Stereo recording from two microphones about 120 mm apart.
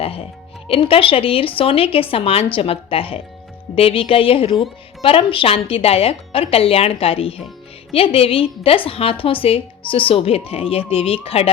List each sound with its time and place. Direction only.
0.0 s music: 55° left (ahead or behind)
0.7 s a woman's voice: 50° left (ahead or behind)